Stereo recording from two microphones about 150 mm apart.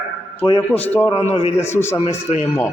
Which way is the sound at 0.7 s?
10° left (ahead or behind).